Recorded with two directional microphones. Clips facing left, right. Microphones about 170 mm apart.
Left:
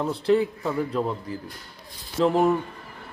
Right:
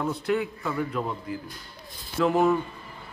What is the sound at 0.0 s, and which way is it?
A man's voice, 30° left (ahead or behind).